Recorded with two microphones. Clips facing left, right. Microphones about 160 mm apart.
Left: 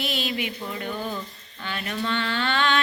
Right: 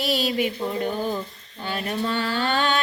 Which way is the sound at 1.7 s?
35° right (ahead or behind).